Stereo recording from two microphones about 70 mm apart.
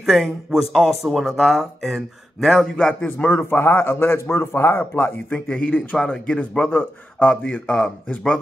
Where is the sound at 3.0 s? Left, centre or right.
Left.